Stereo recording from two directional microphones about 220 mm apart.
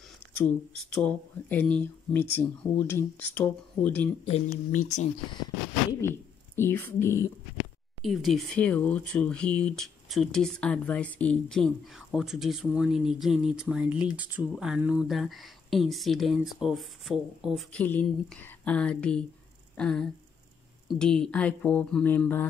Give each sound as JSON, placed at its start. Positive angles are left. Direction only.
{"t": 0.4, "sound": "speech", "side_deg": 5}
{"t": 4.3, "sound": "speech", "side_deg": 30}
{"t": 5.9, "sound": "speech", "side_deg": 10}
{"t": 8.0, "sound": "speech", "side_deg": 0}